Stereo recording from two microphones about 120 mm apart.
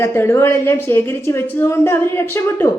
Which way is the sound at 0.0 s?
20° left (ahead or behind).